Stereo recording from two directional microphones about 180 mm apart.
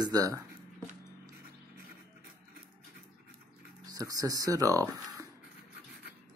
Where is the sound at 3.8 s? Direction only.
20° right (ahead or behind).